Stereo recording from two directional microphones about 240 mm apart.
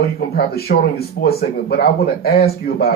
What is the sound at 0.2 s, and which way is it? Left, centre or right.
Speech, left.